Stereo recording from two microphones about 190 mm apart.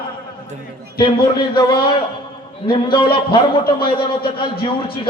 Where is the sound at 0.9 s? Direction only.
25° left (ahead or behind).